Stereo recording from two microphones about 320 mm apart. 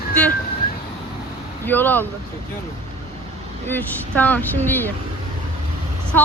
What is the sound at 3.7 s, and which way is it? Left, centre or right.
Speech, centre.